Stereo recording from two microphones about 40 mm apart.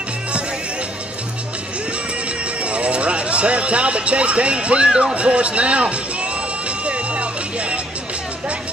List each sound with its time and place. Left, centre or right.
2.6 s speech: right
6.8 s music: right